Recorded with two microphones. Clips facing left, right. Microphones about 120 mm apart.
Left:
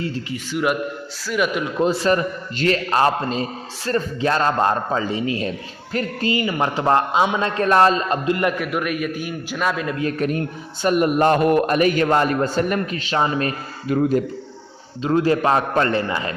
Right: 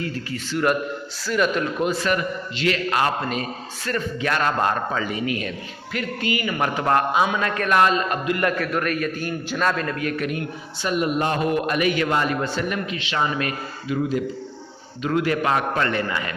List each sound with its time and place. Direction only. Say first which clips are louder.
0.0 s a man's voice: left 2 dB; 25° left (ahead or behind)
0.3 s a man's voice: right 1 dB; 10° left (ahead or behind)
1.8 s a man's voice: left 7 dB; 30° left (ahead or behind); by 9.9 s 10° left (ahead or behind)
10.0 s a man's voice: left 4 dB; 35° left (ahead or behind)
10.8 s a man's voice: left 6 dB; 50° left (ahead or behind); by 13.5 s 35° left (ahead or behind)
13.8 s a man's voice: left 5 dB; 50° left (ahead or behind)
15.0 s a man's voice: left 4 dB; 30° left (ahead or behind)